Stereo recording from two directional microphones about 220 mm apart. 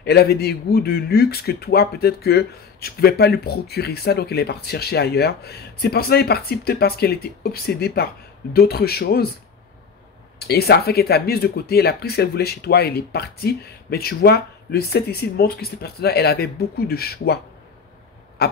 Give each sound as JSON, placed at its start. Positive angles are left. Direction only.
{"t": 0.0, "sound": "speech", "side_deg": 45}
{"t": 10.4, "sound": "speech", "side_deg": 45}
{"t": 18.4, "sound": "speech", "side_deg": 45}